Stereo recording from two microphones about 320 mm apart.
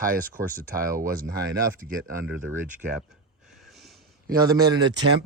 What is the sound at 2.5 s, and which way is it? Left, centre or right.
Speech, centre.